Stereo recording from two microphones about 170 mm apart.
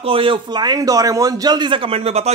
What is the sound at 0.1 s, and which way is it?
Speech, 30° right (ahead or behind).